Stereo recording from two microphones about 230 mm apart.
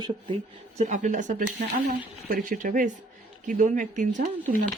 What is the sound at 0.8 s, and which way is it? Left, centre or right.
Speech, right.